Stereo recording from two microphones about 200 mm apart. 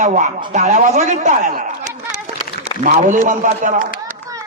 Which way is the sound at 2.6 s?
40° right (ahead or behind).